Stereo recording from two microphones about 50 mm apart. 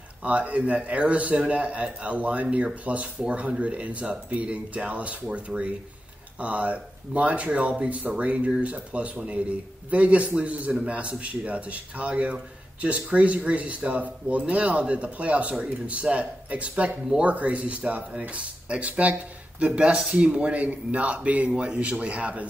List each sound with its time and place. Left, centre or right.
0.2 s speech: right